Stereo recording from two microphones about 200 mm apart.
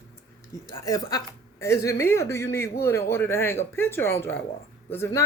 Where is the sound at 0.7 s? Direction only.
15° left (ahead or behind).